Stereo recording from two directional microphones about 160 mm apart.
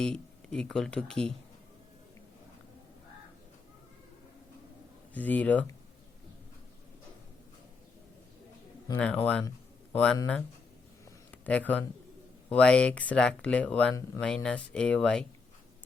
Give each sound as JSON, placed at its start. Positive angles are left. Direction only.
{"t": 0.0, "sound": "speech", "side_deg": 5}
{"t": 5.1, "sound": "speech", "side_deg": 10}
{"t": 8.9, "sound": "speech", "side_deg": 10}
{"t": 11.3, "sound": "speech", "side_deg": 10}